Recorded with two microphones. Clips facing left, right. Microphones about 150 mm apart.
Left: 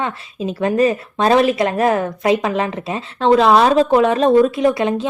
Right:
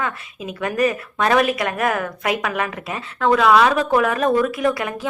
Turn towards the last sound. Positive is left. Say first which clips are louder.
# left 5 dB
turn(degrees=25)  # may be behind; listen again after turning